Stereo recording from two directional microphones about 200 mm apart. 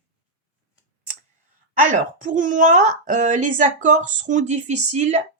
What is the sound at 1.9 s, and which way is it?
A woman's voice, 40° right (ahead or behind).